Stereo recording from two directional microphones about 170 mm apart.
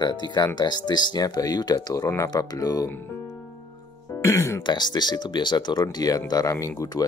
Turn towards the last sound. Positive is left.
turn(degrees=20)  # may be behind; listen again after turning